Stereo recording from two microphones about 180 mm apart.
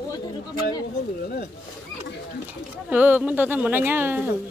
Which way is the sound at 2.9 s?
10° right (ahead or behind).